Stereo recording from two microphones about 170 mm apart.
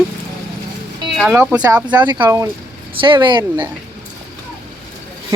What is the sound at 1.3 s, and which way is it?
Speech, 10° right (ahead or behind).